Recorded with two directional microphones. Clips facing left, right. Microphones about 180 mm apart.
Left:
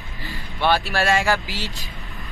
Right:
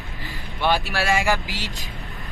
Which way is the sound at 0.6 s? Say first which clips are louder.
Left 2 dB; 15° right (ahead or behind).